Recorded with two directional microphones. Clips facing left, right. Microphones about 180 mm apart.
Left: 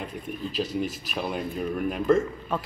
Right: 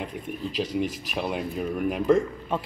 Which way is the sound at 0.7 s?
20° right (ahead or behind).